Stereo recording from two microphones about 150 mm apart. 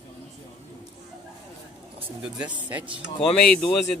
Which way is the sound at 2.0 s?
10° right (ahead or behind).